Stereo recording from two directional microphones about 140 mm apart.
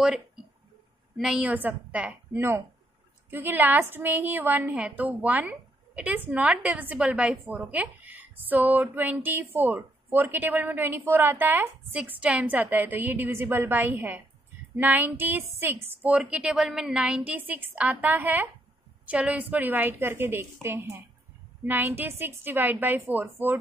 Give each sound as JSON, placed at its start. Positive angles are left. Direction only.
{"t": 1.1, "sound": "speech", "side_deg": -5}